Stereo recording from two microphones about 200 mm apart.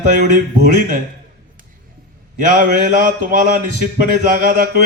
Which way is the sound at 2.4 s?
40° right (ahead or behind).